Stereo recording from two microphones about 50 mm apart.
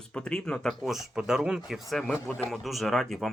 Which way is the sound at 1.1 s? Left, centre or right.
Centre.